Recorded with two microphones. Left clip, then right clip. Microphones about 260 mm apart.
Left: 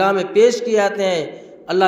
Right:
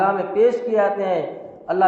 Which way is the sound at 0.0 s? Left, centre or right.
Left.